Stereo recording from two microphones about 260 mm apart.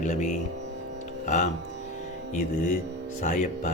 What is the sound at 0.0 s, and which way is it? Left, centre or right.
Speech, left.